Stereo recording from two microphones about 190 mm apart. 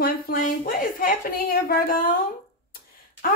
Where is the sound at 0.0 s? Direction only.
50° left (ahead or behind).